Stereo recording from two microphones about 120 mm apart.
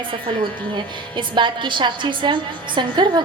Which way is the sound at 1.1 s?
40° right (ahead or behind).